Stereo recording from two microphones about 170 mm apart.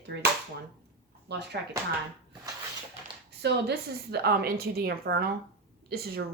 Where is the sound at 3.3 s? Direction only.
85° right.